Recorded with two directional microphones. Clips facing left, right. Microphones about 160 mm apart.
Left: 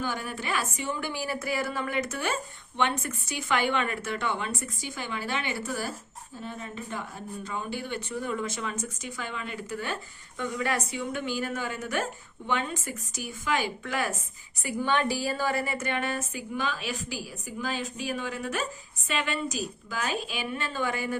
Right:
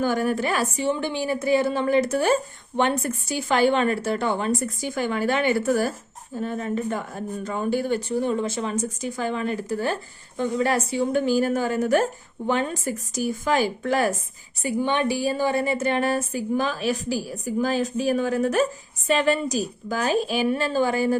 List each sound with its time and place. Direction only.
0.0 s a woman's voice: 45° right (ahead or behind)
14.6 s a woman's voice: 25° right (ahead or behind)